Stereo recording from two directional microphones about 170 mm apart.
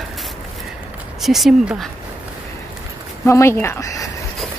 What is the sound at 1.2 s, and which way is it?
Speech, centre (ahead or behind).